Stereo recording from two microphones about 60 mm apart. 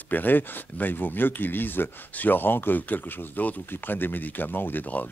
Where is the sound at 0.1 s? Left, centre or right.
Left.